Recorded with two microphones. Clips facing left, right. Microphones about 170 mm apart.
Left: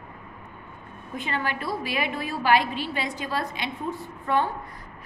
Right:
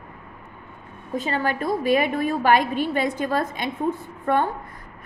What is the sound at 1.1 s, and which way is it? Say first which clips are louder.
A woman's voice: right 5 dB; 40° right (ahead or behind).